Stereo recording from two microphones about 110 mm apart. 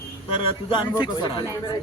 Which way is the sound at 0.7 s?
45° left (ahead or behind).